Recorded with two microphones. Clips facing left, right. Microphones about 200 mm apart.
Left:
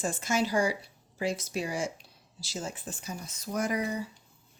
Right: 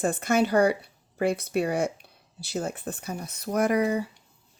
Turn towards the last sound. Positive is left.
turn(degrees=-60)  # may be behind; listen again after turning